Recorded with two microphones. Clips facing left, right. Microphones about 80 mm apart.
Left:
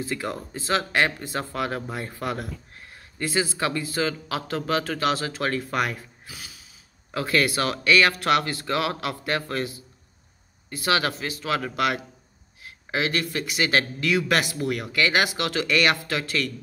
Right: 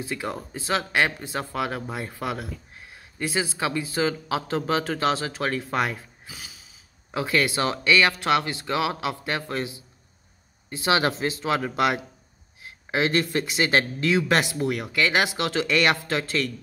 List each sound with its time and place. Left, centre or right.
0.1 s a man's voice: centre; by 16.4 s right